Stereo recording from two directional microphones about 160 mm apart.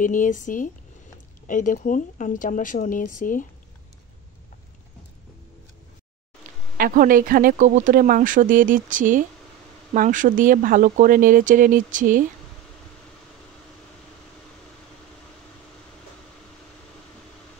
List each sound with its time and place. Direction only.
0.0 s speech: 55° left (ahead or behind)
6.8 s speech: 60° right (ahead or behind)